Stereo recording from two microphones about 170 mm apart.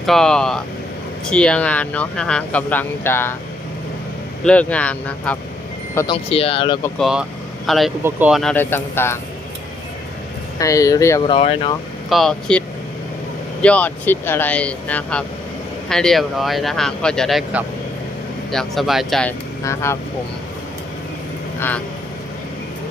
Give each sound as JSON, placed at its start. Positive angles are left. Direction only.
{"t": 0.0, "sound": "speech", "side_deg": 0}
{"t": 4.4, "sound": "speech", "side_deg": 5}
{"t": 6.1, "sound": "speech", "side_deg": 35}
{"t": 7.0, "sound": "speech", "side_deg": -5}
{"t": 8.4, "sound": "speech", "side_deg": 10}
{"t": 10.6, "sound": "speech", "side_deg": 20}
{"t": 11.3, "sound": "speech", "side_deg": 30}
{"t": 12.0, "sound": "speech", "side_deg": 0}
{"t": 19.6, "sound": "speech", "side_deg": 15}